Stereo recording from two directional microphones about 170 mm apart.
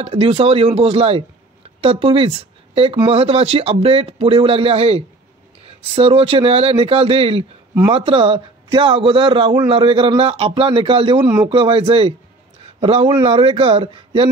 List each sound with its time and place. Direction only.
0.0 s a man's voice: 35° right (ahead or behind)